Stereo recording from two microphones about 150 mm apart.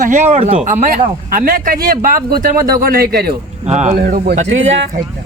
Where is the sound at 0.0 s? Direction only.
55° right (ahead or behind).